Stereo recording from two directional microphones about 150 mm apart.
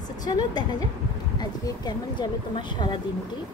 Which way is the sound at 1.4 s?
25° left (ahead or behind).